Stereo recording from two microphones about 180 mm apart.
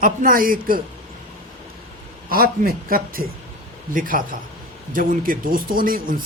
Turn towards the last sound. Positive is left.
turn(degrees=-50)  # may be behind; listen again after turning